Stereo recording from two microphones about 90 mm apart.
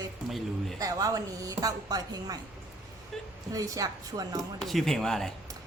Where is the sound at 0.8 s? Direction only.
40° right (ahead or behind).